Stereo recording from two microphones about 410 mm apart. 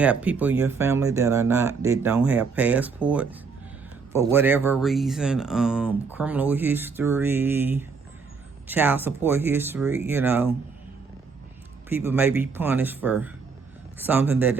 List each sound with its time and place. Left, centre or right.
0.0 s speech: centre
11.9 s speech: centre